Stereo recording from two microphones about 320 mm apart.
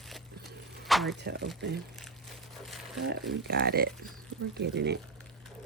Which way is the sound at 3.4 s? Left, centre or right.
Right.